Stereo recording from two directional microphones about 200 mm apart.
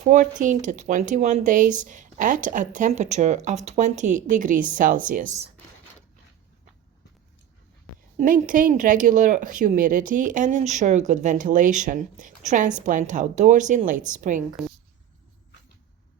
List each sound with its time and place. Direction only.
0.0 s speech: 40° right (ahead or behind)
8.2 s speech: 40° right (ahead or behind)